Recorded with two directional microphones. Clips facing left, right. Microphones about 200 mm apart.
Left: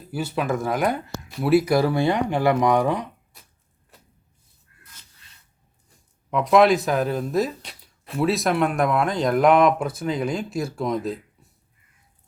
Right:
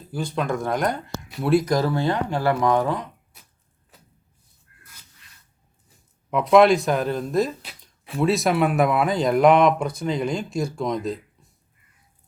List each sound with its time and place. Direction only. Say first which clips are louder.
0.1 s speech: left 1 dB; 5° left (ahead or behind)
6.3 s speech: right 1 dB; centre (ahead or behind)